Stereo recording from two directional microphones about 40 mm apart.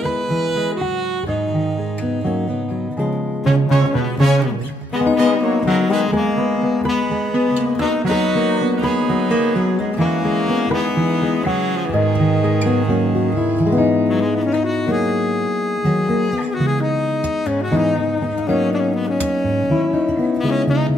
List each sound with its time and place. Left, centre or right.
3.4 s music: centre
7.4 s music: centre
13.6 s music: right
15.9 s guitar: centre
20.4 s saxophone: centre